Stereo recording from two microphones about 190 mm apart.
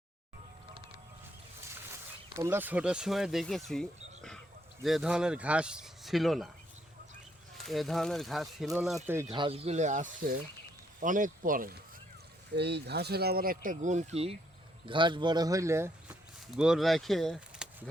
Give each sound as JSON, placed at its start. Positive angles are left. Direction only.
{"t": 2.4, "sound": "speech", "side_deg": -10}
{"t": 7.6, "sound": "speech", "side_deg": 0}
{"t": 9.0, "sound": "speech", "side_deg": -15}
{"t": 9.3, "sound": "speech", "side_deg": -25}
{"t": 12.5, "sound": "speech", "side_deg": -60}
{"t": 16.6, "sound": "speech", "side_deg": 0}